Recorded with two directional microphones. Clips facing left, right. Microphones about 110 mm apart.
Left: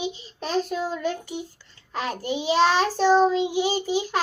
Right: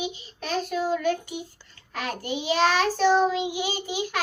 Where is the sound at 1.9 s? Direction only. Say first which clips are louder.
Left 3 dB; 30° left (ahead or behind).